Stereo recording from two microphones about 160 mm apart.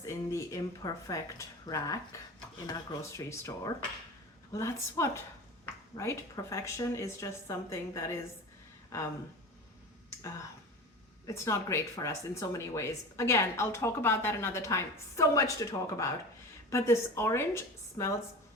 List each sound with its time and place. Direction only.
0.0 s speech: 20° left (ahead or behind)
11.4 s speech: 20° left (ahead or behind)